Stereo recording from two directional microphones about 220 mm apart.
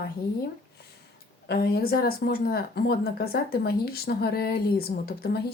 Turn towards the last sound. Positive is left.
turn(degrees=45)  # may be behind; listen again after turning